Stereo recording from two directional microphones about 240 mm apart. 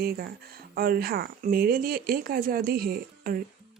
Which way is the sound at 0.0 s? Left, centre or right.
Right.